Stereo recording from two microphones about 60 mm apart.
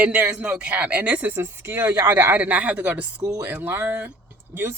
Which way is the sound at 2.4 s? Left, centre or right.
Right.